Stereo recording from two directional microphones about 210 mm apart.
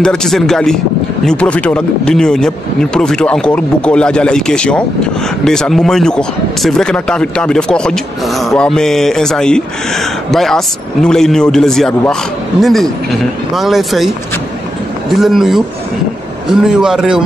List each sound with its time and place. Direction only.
0.0 s speech: 5° left (ahead or behind)